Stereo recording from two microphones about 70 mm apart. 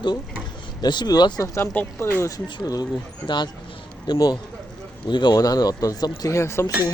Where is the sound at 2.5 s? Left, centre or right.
Left.